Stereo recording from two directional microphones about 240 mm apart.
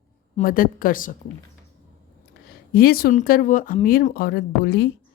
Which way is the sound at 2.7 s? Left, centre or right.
Left.